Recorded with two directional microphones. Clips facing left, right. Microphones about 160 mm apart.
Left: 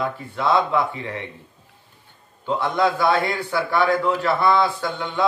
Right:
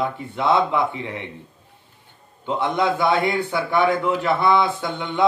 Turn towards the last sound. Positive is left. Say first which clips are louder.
# even
turn(degrees=-20)  # may be behind; listen again after turning